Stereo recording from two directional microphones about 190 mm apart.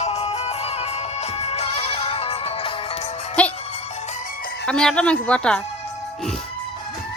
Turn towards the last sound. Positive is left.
turn(degrees=5)  # may be behind; listen again after turning